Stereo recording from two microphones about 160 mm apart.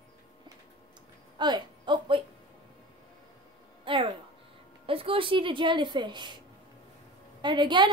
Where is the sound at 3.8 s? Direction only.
30° right (ahead or behind).